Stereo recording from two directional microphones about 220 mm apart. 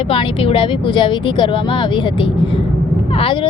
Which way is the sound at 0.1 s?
25° left (ahead or behind).